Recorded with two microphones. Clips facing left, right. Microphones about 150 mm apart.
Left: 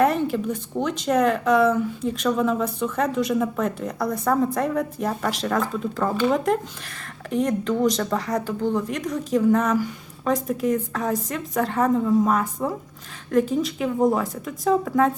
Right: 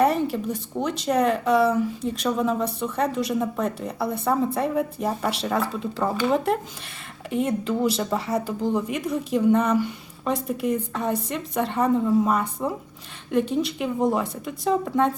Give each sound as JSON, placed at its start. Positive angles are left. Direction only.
{"t": 0.2, "sound": "a woman's voice", "side_deg": 0}